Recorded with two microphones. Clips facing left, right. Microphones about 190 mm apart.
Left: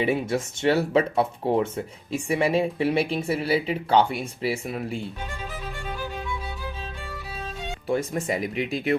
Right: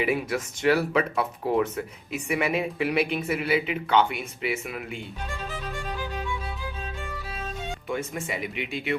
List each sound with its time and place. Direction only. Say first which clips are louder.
0.0 s speech: left 2 dB; 25° left (ahead or behind)
7.9 s speech: left 7 dB; 35° left (ahead or behind)